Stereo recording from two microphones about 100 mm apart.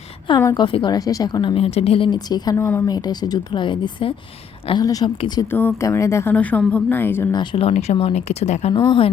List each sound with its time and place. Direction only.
0.5 s speech: 55° left (ahead or behind)
0.9 s a woman's voice: 35° left (ahead or behind)
1.5 s speech: 80° left
2.1 s speech: 40° left (ahead or behind)
2.6 s a woman's voice: 25° left (ahead or behind)
2.8 s speech: 40° left (ahead or behind)
4.8 s a woman's voice: 40° left (ahead or behind)
5.0 s speech: 50° left (ahead or behind)
5.5 s a woman's voice: 20° left (ahead or behind)
6.3 s a woman's voice: 15° left (ahead or behind)
7.5 s speech: 85° left
8.7 s speech: 50° left (ahead or behind)